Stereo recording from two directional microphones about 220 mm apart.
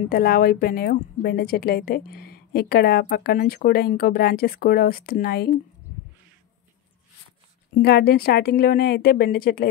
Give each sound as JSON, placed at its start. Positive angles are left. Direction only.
{"t": 0.1, "sound": "a woman's voice", "side_deg": 40}
{"t": 7.7, "sound": "a woman's voice", "side_deg": 45}